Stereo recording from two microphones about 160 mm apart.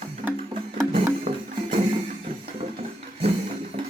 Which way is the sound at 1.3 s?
40° right (ahead or behind).